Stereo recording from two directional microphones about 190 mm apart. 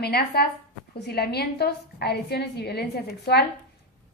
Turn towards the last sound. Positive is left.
turn(degrees=60)  # may be behind; listen again after turning